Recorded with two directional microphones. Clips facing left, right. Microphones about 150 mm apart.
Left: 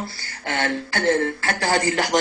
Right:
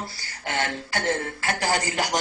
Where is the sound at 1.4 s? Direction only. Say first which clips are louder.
Left 3 dB; 15° right (ahead or behind).